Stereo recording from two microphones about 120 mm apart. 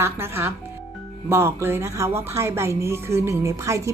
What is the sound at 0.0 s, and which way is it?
A woman's voice, 20° right (ahead or behind).